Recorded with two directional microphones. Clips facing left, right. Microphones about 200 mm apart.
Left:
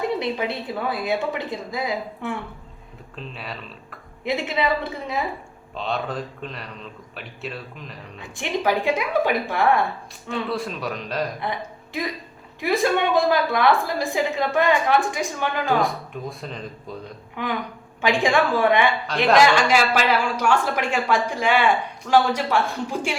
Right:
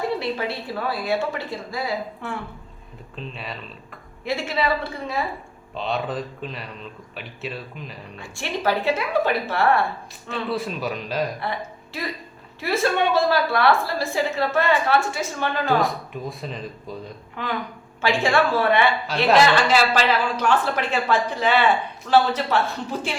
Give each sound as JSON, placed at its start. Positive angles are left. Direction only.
{"t": 0.0, "sound": "a woman's voice", "side_deg": 20}
{"t": 3.2, "sound": "a man's voice", "side_deg": 0}
{"t": 4.2, "sound": "a woman's voice", "side_deg": 20}
{"t": 5.7, "sound": "a man's voice", "side_deg": 0}
{"t": 8.2, "sound": "a woman's voice", "side_deg": 15}
{"t": 10.2, "sound": "a man's voice", "side_deg": 0}
{"t": 11.9, "sound": "a woman's voice", "side_deg": 15}
{"t": 16.4, "sound": "a man's voice", "side_deg": 0}
{"t": 18.0, "sound": "a woman's voice", "side_deg": 15}